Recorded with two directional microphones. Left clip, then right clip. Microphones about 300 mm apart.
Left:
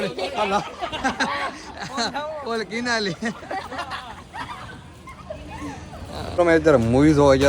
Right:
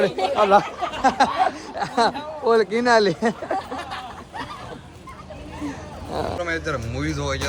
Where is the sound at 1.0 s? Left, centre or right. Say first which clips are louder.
Right 7 dB; centre.